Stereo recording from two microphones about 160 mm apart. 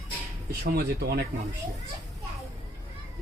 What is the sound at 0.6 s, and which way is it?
Speech, 75° right (ahead or behind).